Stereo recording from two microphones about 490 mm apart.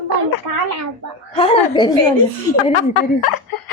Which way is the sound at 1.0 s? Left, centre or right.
Right.